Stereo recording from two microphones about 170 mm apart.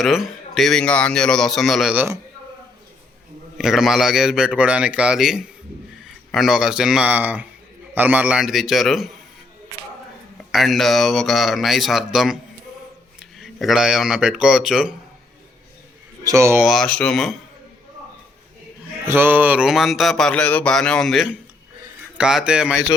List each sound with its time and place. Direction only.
0.0 s mantra: centre (ahead or behind)
3.6 s mantra: 5° right (ahead or behind)
10.5 s mantra: centre (ahead or behind)
13.1 s speech: centre (ahead or behind)
16.2 s speech: 20° right (ahead or behind)
16.6 s mantra: 5° left (ahead or behind)
19.0 s mantra: 15° right (ahead or behind)